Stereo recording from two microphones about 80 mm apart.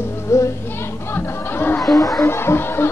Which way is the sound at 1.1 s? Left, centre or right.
Left.